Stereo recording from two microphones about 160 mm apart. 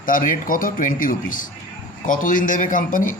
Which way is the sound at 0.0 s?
60° left (ahead or behind).